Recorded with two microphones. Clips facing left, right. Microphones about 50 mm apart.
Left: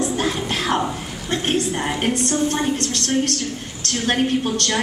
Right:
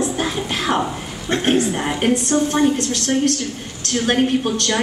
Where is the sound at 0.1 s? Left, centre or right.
Centre.